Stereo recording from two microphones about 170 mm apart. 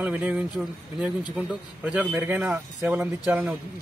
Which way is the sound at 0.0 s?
5° right (ahead or behind).